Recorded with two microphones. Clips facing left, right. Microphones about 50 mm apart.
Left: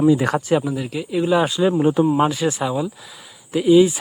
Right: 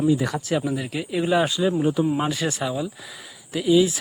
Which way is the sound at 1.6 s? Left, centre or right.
Left.